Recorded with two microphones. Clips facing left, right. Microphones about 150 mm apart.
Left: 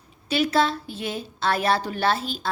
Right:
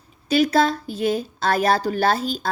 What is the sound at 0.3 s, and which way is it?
A woman's voice, 40° right (ahead or behind).